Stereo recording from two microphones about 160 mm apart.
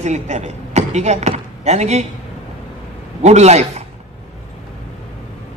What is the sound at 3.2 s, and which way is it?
Speech, 45° right (ahead or behind).